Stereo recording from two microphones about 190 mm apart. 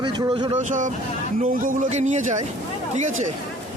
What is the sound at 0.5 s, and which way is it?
A man's voice, 40° right (ahead or behind).